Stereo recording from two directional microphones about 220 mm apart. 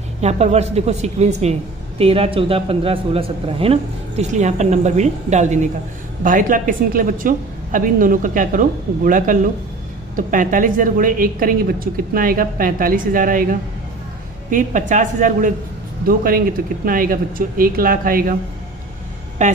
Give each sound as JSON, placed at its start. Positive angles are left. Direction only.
{"t": 0.2, "sound": "a woman's voice", "side_deg": -30}
{"t": 19.4, "sound": "a woman's voice", "side_deg": -35}